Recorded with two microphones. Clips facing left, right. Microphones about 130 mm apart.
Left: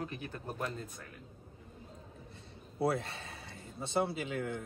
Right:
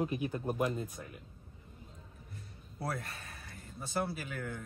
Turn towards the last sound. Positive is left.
turn(degrees=25)  # may be behind; listen again after turning